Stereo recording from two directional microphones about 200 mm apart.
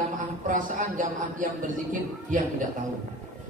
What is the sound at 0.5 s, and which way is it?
Speech, 40° right (ahead or behind).